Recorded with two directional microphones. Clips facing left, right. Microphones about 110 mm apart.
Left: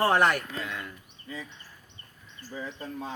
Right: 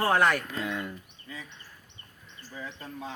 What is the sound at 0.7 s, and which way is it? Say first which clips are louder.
Speech: right 4 dB; 20° right (ahead or behind).